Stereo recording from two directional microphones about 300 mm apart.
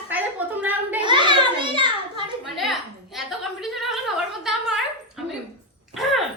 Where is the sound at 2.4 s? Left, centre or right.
Centre.